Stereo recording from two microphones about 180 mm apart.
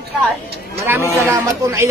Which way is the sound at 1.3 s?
15° right (ahead or behind).